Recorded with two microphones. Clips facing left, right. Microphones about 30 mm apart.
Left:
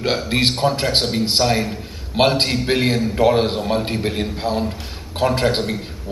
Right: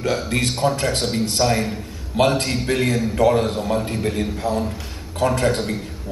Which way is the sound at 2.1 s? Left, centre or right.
Left.